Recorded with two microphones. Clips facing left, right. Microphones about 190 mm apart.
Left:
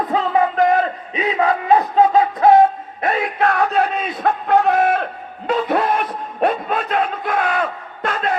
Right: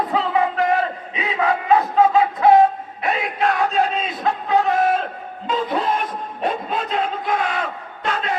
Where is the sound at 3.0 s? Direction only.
60° left (ahead or behind).